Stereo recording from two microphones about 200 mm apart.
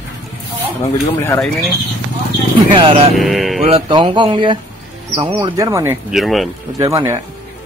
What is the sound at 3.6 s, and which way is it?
Speech, 25° right (ahead or behind).